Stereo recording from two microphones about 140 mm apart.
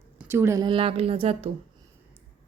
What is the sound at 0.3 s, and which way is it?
Speech, 20° right (ahead or behind).